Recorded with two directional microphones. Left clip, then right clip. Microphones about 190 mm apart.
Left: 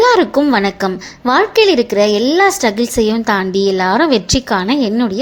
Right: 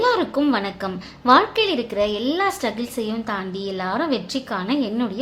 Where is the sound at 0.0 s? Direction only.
35° left (ahead or behind).